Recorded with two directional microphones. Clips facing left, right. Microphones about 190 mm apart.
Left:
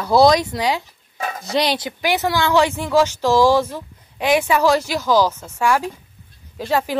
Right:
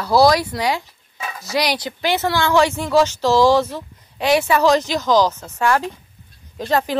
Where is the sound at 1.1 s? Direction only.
45° left (ahead or behind).